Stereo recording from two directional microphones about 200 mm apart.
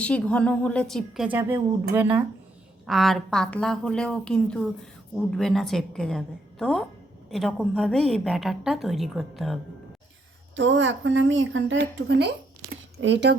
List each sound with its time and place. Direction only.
0.0 s a woman's voice: 5° left (ahead or behind)
10.5 s speech: 65° right (ahead or behind)